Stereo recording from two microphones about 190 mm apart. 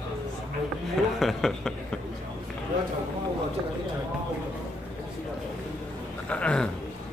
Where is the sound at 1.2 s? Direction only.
Centre (ahead or behind).